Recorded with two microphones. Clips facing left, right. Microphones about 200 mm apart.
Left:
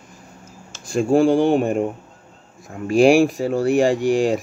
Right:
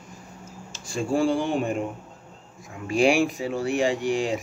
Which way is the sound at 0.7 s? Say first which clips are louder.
Left 8 dB; 60° left (ahead or behind).